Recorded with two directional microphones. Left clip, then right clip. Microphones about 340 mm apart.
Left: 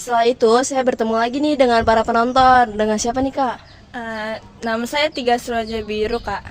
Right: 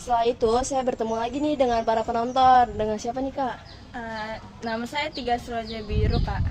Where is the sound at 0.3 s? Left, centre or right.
Left.